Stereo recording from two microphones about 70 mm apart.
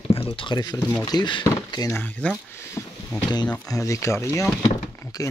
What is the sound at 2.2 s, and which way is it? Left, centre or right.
Speech, centre.